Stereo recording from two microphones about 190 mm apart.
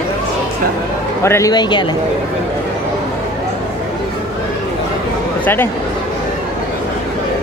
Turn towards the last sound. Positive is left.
turn(degrees=10)  # may be behind; listen again after turning